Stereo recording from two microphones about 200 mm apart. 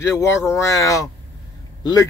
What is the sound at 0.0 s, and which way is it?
A man's voice, 15° left (ahead or behind).